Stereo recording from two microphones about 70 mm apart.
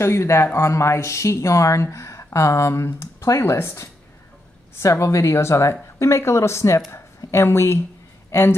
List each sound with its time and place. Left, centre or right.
0.0 s a man's voice: left